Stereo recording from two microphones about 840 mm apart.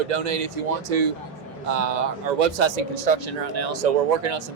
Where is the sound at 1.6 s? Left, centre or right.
Right.